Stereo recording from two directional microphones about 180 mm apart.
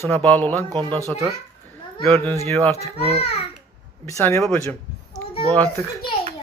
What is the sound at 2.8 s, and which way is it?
Speech, 30° right (ahead or behind).